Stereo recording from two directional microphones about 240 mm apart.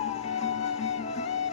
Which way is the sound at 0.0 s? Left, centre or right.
Left.